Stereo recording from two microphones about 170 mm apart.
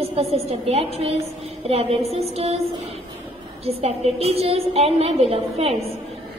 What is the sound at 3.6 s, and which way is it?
A woman's voice, 35° right (ahead or behind).